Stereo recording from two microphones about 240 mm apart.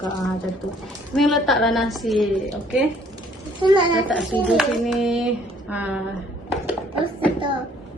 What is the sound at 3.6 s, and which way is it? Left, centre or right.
Speech, centre.